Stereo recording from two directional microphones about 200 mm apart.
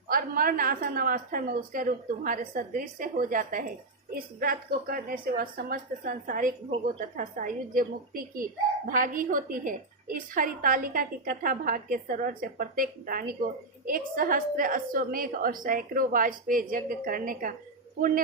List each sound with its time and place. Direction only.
0.1 s a woman's voice: 45° right (ahead or behind)